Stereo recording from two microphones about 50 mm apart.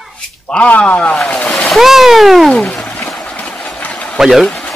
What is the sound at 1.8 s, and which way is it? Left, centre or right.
Cat, centre.